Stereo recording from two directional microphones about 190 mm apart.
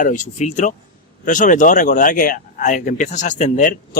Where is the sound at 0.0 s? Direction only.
40° left (ahead or behind).